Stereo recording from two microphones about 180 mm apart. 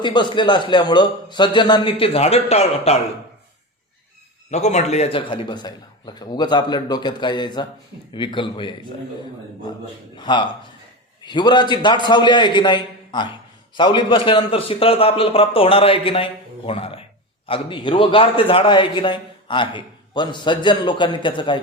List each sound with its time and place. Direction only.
0.0 s a man's voice: 25° left (ahead or behind)
4.5 s a man's voice: 40° left (ahead or behind)
10.2 s a man's voice: 25° left (ahead or behind)